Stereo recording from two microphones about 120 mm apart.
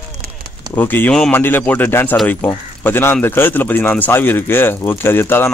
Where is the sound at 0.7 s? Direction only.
15° left (ahead or behind).